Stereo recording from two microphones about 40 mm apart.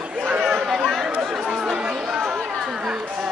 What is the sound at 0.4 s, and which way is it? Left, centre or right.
Chatter, centre.